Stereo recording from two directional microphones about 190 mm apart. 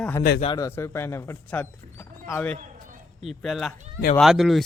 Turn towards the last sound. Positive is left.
turn(degrees=0)  # may be behind; listen again after turning